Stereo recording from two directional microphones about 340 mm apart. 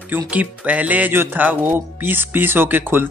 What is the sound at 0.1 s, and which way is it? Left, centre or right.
A man's voice, centre.